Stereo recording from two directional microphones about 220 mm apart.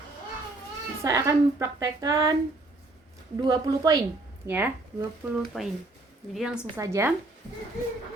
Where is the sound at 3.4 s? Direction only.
15° right (ahead or behind).